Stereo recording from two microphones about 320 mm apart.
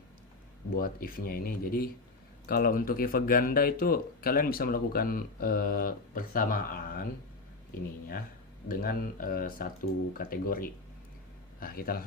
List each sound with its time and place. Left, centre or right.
0.8 s speech: left
8.6 s speech: left